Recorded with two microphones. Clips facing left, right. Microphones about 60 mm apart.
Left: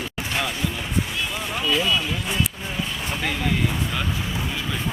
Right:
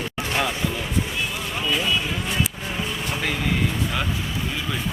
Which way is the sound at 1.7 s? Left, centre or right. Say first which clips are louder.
Left 1 dB; centre.